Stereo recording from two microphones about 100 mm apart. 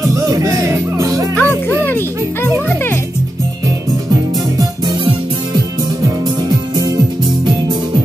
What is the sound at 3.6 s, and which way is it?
Music, 35° right (ahead or behind).